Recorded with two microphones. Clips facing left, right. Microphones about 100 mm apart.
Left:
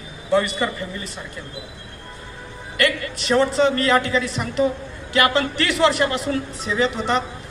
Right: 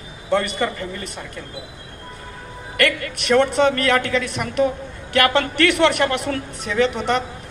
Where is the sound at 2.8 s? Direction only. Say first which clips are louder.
Right 1 dB; 55° right (ahead or behind).